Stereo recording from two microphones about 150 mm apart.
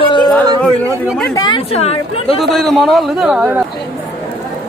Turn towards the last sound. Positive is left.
turn(degrees=-5)  # may be behind; listen again after turning